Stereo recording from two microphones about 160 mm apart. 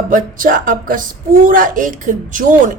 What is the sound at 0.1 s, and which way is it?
Speech, 60° right (ahead or behind).